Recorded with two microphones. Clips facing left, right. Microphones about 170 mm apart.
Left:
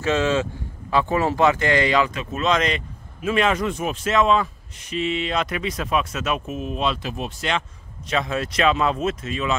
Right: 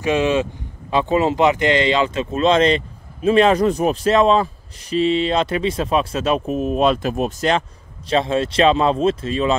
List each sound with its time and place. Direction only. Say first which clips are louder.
0.0 s speech: right 3 dB; 15° right (ahead or behind); by 7.6 s 40° right (ahead or behind)
8.1 s speech: right 6 dB; 30° right (ahead or behind)